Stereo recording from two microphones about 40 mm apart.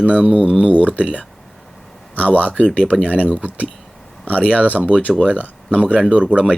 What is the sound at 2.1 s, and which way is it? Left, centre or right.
Speech, left.